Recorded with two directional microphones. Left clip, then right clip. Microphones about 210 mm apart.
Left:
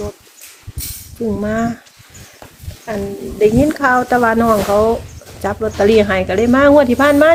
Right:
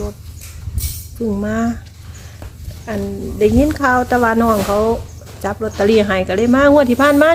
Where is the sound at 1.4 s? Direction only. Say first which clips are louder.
Left 2 dB; 10° right (ahead or behind).